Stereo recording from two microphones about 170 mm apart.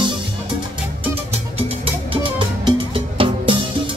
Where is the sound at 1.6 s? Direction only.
35° right (ahead or behind).